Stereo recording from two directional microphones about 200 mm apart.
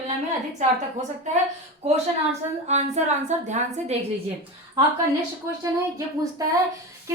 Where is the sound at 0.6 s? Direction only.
35° right (ahead or behind).